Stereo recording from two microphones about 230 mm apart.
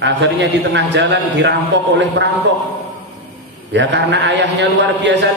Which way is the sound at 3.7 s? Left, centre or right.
Right.